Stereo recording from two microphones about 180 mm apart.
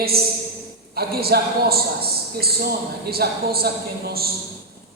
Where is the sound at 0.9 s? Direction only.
60° right (ahead or behind).